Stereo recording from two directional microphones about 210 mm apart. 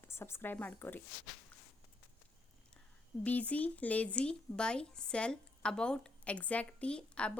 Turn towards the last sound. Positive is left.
turn(degrees=5)  # may be behind; listen again after turning